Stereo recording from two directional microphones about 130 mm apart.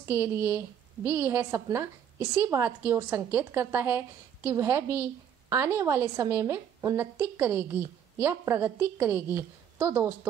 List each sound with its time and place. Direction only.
0.1 s a woman's voice: 15° right (ahead or behind)